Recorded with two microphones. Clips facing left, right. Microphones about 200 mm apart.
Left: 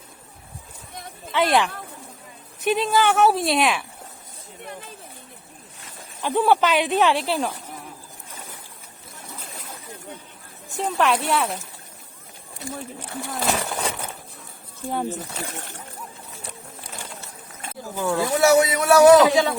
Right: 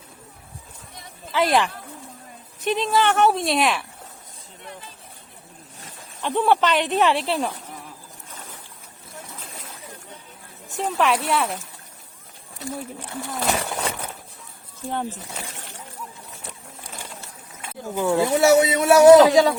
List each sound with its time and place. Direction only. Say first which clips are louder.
1.3 s speech: even; centre (ahead or behind)
6.2 s speech: left 1 dB; 5° left (ahead or behind)
10.8 s speech: even; centre (ahead or behind)
13.0 s speech: even; centre (ahead or behind)
17.8 s speech: right 3 dB; 25° right (ahead or behind)
19.3 s speech: right 4 dB; 40° right (ahead or behind)